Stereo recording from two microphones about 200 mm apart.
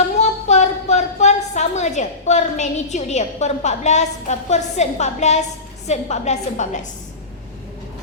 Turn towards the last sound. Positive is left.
turn(degrees=35)  # may be behind; listen again after turning